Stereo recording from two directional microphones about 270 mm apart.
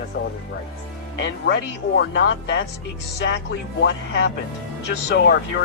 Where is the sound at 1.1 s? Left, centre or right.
Left.